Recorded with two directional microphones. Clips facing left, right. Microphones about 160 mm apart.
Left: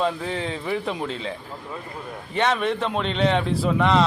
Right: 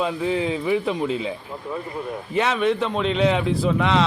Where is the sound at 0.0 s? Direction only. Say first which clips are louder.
Right 3 dB; 5° right (ahead or behind).